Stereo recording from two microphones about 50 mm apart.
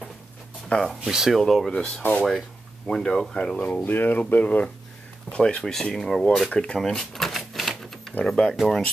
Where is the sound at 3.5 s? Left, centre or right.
Left.